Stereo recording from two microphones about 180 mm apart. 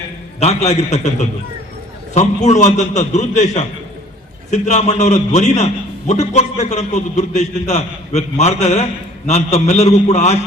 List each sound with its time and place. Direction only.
0.3 s a man's voice: 35° left (ahead or behind)